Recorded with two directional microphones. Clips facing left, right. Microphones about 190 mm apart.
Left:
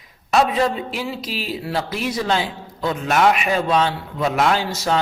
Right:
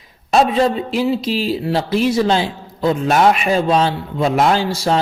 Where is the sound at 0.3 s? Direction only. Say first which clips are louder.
Right 4 dB; 30° right (ahead or behind).